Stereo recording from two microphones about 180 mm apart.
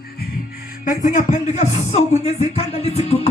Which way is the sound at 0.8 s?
45° left (ahead or behind).